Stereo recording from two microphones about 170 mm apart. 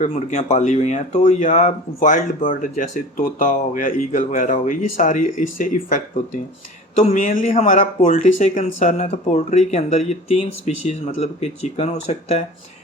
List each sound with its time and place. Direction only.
0.0 s speech: 40° left (ahead or behind)